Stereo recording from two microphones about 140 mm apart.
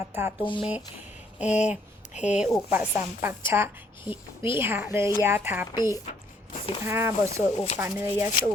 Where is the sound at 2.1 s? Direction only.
60° left (ahead or behind).